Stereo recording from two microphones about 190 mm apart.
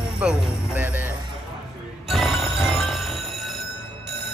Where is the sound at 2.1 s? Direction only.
Centre (ahead or behind).